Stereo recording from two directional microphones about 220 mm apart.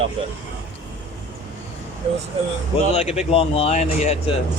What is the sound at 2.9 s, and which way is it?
Speech, 30° left (ahead or behind).